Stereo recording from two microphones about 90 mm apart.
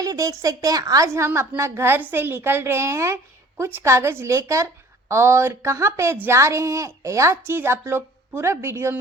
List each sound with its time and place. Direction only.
0.0 s a woman's voice: 40° right (ahead or behind)